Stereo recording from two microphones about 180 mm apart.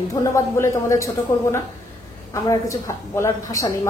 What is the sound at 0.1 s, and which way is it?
A woman's voice, 15° left (ahead or behind).